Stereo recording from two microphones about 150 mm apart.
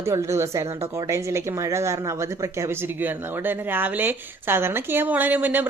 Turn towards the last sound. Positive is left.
turn(degrees=-10)  # may be behind; listen again after turning